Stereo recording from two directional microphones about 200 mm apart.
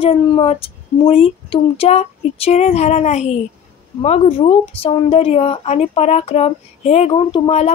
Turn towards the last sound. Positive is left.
turn(degrees=30)  # may be behind; listen again after turning